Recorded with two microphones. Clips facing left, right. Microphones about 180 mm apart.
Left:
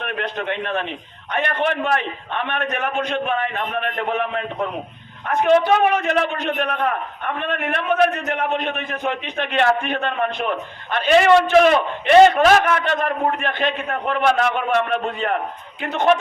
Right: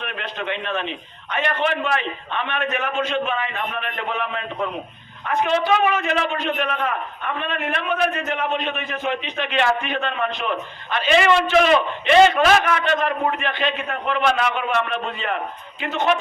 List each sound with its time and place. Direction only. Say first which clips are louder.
0.0 s a man's voice: left 3 dB; 50° left (ahead or behind)